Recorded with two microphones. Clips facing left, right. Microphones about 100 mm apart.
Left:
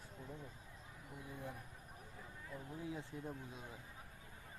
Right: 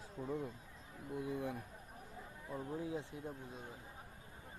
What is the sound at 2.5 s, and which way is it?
Speech, 25° right (ahead or behind).